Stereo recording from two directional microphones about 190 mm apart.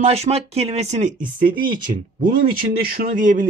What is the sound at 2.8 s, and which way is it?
Speech, 50° right (ahead or behind).